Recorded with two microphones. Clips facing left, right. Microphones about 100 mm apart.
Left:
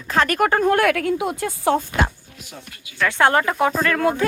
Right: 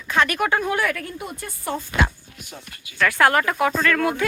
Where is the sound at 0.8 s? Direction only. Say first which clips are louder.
Left 7 dB; 85° left.